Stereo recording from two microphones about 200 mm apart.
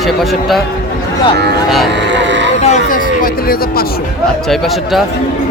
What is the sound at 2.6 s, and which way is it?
Speech, 35° left (ahead or behind).